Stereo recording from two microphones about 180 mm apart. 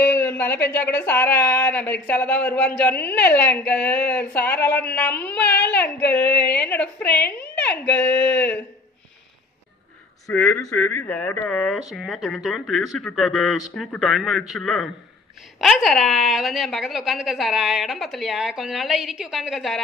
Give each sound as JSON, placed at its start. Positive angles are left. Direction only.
{"t": 0.4, "sound": "a woman's voice", "side_deg": 10}
{"t": 5.5, "sound": "speech", "side_deg": 70}
{"t": 5.8, "sound": "a woman's voice", "side_deg": 10}
{"t": 10.3, "sound": "speech", "side_deg": 0}